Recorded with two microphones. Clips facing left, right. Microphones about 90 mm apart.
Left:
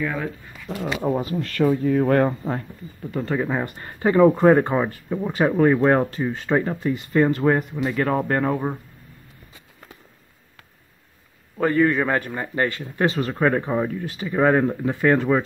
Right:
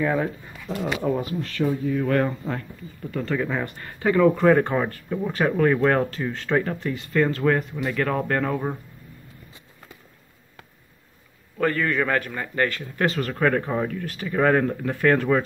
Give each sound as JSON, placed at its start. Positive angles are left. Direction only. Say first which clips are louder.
{"t": 0.0, "sound": "speech", "louder": "right 3 dB", "side_deg": -25}
{"t": 1.1, "sound": "speech", "louder": "left 2 dB", "side_deg": 35}
{"t": 1.5, "sound": "speech", "louder": "left 5 dB", "side_deg": 60}
{"t": 2.0, "sound": "speech", "louder": "left 3 dB", "side_deg": 35}
{"t": 3.1, "sound": "a man's voice", "louder": "left 2 dB", "side_deg": 20}
{"t": 11.5, "sound": "a man's voice", "louder": "left 4 dB", "side_deg": 15}